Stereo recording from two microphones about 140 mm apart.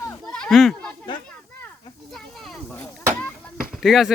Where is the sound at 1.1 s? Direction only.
30° left (ahead or behind).